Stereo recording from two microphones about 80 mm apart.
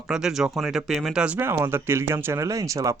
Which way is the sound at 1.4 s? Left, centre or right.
Right.